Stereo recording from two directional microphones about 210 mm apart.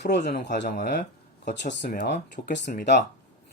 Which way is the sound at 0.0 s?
50° left (ahead or behind).